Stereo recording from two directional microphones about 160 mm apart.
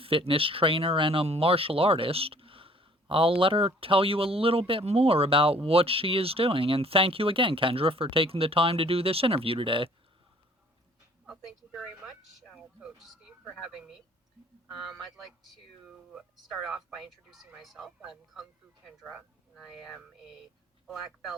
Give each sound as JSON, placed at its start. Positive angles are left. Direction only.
{"t": 0.0, "sound": "speech", "side_deg": -35}
{"t": 11.3, "sound": "speech", "side_deg": -5}